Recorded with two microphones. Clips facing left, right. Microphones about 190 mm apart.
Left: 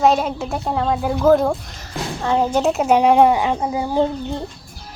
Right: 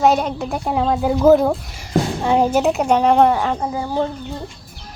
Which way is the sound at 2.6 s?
Centre (ahead or behind).